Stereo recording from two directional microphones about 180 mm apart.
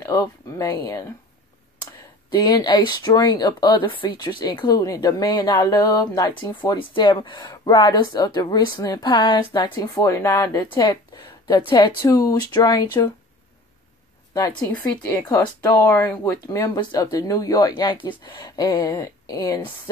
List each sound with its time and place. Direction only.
0.0 s speech: 15° left (ahead or behind)
2.3 s speech: 25° left (ahead or behind)
14.7 s a woman's voice: 10° left (ahead or behind)